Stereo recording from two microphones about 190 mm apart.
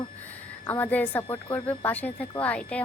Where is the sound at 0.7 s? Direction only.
10° left (ahead or behind).